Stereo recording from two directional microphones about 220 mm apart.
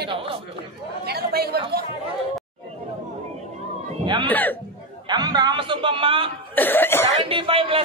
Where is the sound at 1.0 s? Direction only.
45° right (ahead or behind).